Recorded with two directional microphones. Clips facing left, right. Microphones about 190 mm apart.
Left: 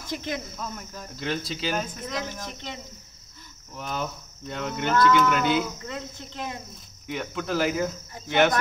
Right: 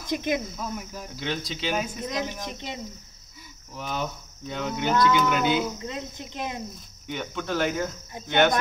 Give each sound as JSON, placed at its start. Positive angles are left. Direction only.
{"t": 0.1, "sound": "speech", "side_deg": -15}
{"t": 0.5, "sound": "speech", "side_deg": -5}
{"t": 2.0, "sound": "speech", "side_deg": -15}
{"t": 3.7, "sound": "speech", "side_deg": 0}
{"t": 5.8, "sound": "speech", "side_deg": -20}
{"t": 7.1, "sound": "speech", "side_deg": 0}